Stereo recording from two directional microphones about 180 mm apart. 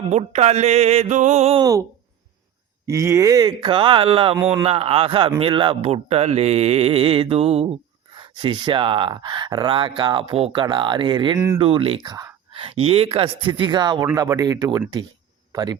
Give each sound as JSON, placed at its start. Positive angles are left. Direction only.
{"t": 0.1, "sound": "speech", "side_deg": -35}
{"t": 2.8, "sound": "speech", "side_deg": -15}
{"t": 4.4, "sound": "speech", "side_deg": -15}
{"t": 4.6, "sound": "speech", "side_deg": -35}